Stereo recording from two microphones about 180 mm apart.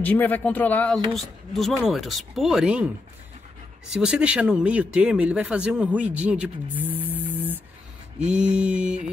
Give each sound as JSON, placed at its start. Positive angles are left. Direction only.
{"t": 0.0, "sound": "speech", "side_deg": 10}
{"t": 3.9, "sound": "speech", "side_deg": -5}